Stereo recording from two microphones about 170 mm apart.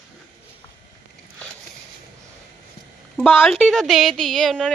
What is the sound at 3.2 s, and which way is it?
A woman's voice, centre (ahead or behind).